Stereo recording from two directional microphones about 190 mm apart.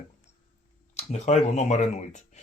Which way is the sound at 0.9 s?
35° left (ahead or behind).